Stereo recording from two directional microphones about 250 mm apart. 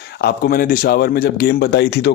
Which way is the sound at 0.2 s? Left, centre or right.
Left.